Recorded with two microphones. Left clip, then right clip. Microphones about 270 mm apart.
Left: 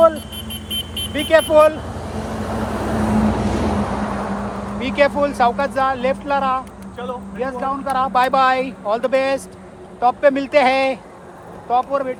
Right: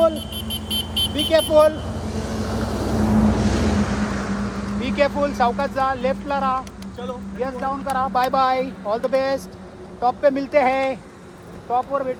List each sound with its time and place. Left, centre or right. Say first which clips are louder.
0.7 s vehicle: right 2 dB; centre
1.3 s vehicle: left 4 dB; left; by 4.8 s centre
4.9 s speech: left 4 dB; left